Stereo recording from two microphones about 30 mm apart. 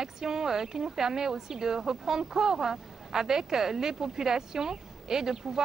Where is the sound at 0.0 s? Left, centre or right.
Centre.